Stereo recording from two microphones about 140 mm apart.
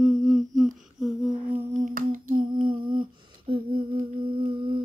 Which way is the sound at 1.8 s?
80° right.